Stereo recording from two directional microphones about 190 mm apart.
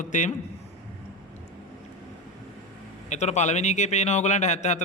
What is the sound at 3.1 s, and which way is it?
A man's voice, 35° left (ahead or behind).